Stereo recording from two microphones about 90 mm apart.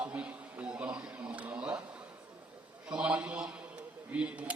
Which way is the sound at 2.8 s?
10° right (ahead or behind).